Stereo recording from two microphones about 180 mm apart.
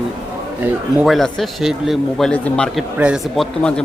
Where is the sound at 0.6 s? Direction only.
5° right (ahead or behind).